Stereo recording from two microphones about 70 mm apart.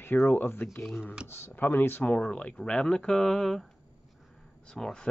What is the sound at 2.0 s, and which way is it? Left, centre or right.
Speech, centre.